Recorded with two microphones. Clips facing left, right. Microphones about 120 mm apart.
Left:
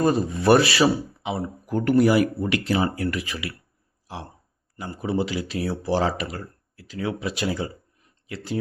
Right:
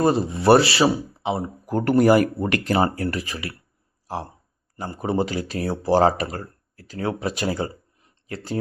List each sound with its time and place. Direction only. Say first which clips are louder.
0.0 s speech: right 2 dB; 30° right (ahead or behind)
4.0 s a sound: right 6 dB; 40° right (ahead or behind)
4.8 s speech: right 2 dB; 45° right (ahead or behind)